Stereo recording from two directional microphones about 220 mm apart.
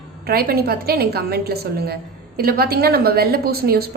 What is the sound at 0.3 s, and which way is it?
A woman's voice, 45° right (ahead or behind).